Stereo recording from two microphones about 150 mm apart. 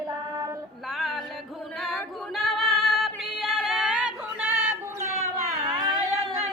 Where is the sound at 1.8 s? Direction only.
Centre (ahead or behind).